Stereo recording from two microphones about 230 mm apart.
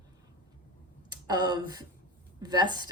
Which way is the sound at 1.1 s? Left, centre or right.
Centre.